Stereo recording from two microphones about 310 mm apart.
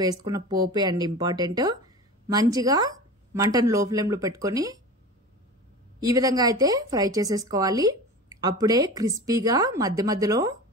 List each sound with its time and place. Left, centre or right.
0.0 s a woman's voice: centre
5.9 s a woman's voice: centre